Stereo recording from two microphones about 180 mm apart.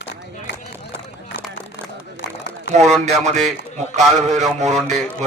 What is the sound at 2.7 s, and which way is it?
Speech, 40° right (ahead or behind).